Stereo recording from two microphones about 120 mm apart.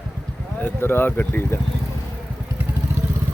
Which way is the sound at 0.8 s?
20° left (ahead or behind).